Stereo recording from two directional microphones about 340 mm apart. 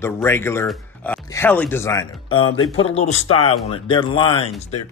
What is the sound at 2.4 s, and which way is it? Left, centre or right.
Speech, left.